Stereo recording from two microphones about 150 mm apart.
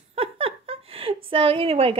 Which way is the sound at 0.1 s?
40° right (ahead or behind).